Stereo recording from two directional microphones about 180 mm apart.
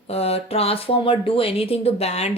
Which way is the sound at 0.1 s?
35° left (ahead or behind).